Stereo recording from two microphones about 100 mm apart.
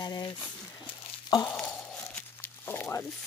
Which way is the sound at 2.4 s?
20° left (ahead or behind).